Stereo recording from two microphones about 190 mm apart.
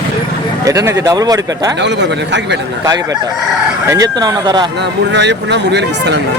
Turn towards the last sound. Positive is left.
turn(degrees=-65)  # may be behind; listen again after turning